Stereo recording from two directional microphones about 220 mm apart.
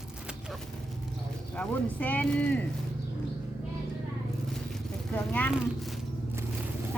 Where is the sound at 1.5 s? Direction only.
5° left (ahead or behind).